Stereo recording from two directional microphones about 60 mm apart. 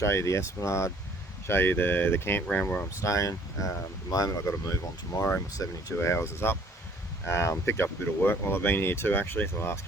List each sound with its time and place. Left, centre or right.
0.0 s speech: left
1.5 s speech: left
2.5 s speech: left
3.0 s speech: left
5.1 s speech: left
5.6 s speech: left
6.0 s speech: left